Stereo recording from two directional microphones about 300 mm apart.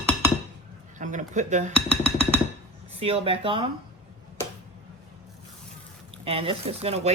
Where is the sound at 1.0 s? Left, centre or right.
Right.